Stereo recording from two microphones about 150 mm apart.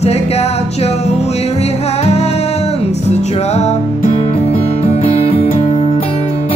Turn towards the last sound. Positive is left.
turn(degrees=45)  # may be behind; listen again after turning